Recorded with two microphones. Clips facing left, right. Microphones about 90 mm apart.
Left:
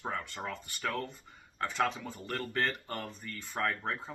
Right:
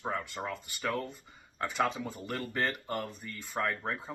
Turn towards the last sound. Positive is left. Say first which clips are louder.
# even
turn(degrees=-5)  # may be behind; listen again after turning